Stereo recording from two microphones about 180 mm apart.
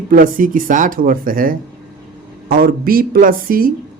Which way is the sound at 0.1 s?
50° right (ahead or behind).